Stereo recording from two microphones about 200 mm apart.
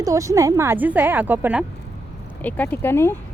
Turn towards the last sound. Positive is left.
turn(degrees=10)  # may be behind; listen again after turning